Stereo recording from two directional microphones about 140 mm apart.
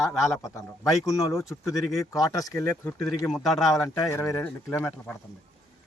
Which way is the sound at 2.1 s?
25° left (ahead or behind).